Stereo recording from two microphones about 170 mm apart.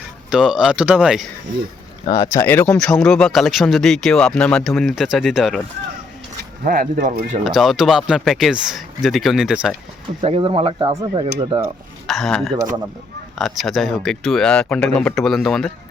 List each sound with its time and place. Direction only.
0.3 s speech: 5° right (ahead or behind)
2.0 s speech: 25° left (ahead or behind); by 5.5 s centre (ahead or behind)
6.7 s speech: 55° right (ahead or behind)
7.4 s speech: centre (ahead or behind)
10.2 s speech: 30° right (ahead or behind)
12.0 s a man's voice: centre (ahead or behind)